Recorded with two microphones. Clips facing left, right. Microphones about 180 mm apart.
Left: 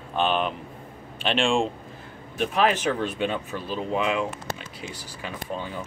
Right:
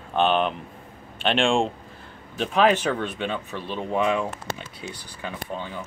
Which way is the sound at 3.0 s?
5° left (ahead or behind).